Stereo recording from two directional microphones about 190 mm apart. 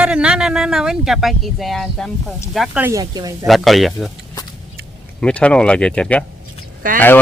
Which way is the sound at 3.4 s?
Centre (ahead or behind).